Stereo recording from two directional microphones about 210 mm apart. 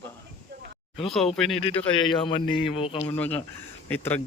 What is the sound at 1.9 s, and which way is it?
Speech, 25° left (ahead or behind).